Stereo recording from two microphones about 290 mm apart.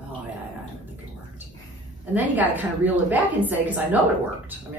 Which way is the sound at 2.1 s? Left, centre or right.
Centre.